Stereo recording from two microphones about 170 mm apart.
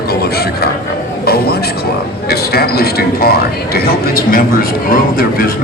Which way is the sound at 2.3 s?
65° left (ahead or behind).